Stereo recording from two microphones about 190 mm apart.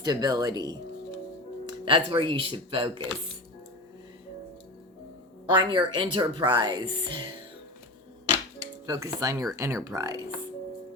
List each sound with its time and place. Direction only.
0.0 s speech: 20° right (ahead or behind)
5.5 s speech: 25° right (ahead or behind)
8.9 s speech: 15° right (ahead or behind)